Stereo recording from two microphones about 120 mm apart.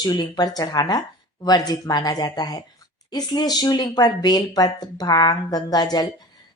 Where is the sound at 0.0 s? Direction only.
35° left (ahead or behind).